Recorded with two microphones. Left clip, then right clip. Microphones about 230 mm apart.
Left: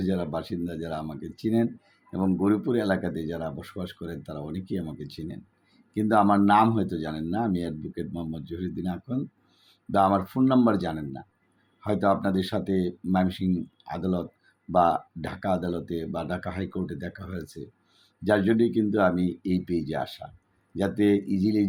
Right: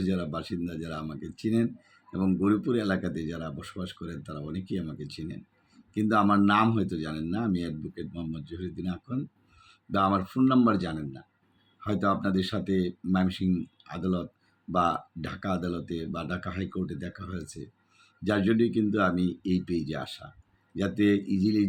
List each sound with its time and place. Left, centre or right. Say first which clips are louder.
0.0 s speech: left 3 dB; centre
0.9 s speech: left 4 dB; right
1.4 s speech: left 3 dB; centre
10.3 s speech: left 2 dB; centre
14.0 s speech: left 2 dB; right
14.7 s speech: left 5 dB; centre
19.2 s speech: left 2 dB; right
19.6 s speech: left 4 dB; centre